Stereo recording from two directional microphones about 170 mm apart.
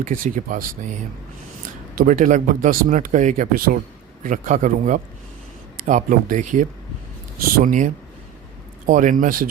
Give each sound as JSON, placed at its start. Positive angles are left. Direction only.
{"t": 0.0, "sound": "speech", "side_deg": -50}
{"t": 5.7, "sound": "a sound", "side_deg": -50}
{"t": 6.0, "sound": "speech", "side_deg": -50}
{"t": 7.3, "sound": "speech", "side_deg": -60}